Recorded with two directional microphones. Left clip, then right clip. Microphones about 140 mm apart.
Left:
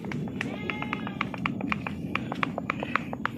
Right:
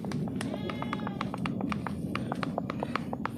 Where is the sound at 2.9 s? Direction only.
20° right (ahead or behind).